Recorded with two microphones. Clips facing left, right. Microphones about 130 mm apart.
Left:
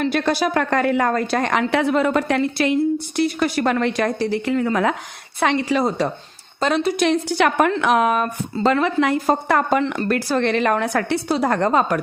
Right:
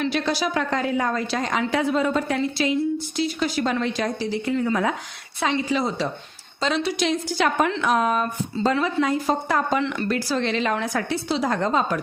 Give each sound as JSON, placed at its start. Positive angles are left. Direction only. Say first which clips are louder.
{"t": 0.0, "sound": "a woman's voice", "louder": "left 4 dB", "side_deg": 55}
{"t": 9.2, "sound": "a woman's voice", "louder": "left 4 dB", "side_deg": 60}
{"t": 9.8, "sound": "a woman's voice", "louder": "left 3 dB", "side_deg": 40}
{"t": 10.1, "sound": "a woman's voice", "louder": "left 4 dB", "side_deg": 55}